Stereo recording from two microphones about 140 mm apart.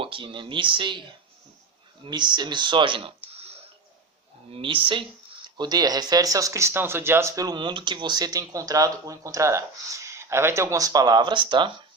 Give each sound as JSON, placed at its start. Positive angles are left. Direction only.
{"t": 0.0, "sound": "speech", "side_deg": -40}
{"t": 2.0, "sound": "speech", "side_deg": -35}
{"t": 3.3, "sound": "a sound", "side_deg": -45}
{"t": 4.5, "sound": "speech", "side_deg": -40}